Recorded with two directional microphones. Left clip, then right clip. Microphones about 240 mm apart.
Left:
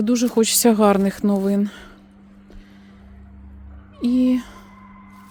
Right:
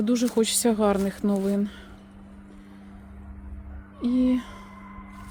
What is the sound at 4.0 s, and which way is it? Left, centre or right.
Speech, left.